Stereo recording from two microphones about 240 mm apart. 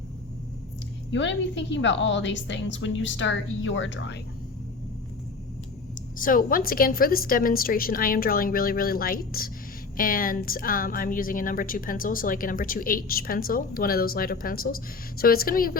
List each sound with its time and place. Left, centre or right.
1.1 s a woman's voice: left
6.1 s a woman's voice: left